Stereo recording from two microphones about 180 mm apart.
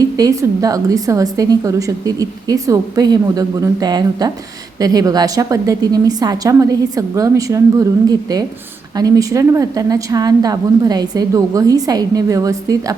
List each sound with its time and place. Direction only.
0.0 s a woman's voice: 20° right (ahead or behind)